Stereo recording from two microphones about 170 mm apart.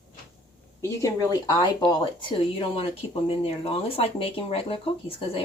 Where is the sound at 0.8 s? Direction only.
20° left (ahead or behind).